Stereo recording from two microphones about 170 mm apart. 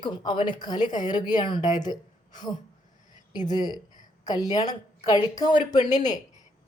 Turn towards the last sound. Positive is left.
turn(degrees=25)  # may be behind; listen again after turning